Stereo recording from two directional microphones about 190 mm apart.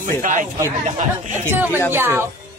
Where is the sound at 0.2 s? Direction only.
45° right (ahead or behind).